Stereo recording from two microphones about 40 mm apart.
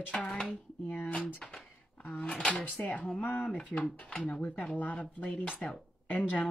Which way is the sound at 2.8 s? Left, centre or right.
Left.